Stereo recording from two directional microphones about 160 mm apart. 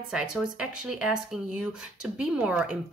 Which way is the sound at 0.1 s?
5° right (ahead or behind).